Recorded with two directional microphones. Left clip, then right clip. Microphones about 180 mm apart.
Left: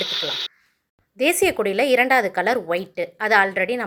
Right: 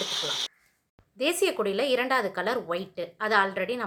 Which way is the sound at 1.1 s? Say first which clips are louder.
Left 7 dB; 30° left (ahead or behind).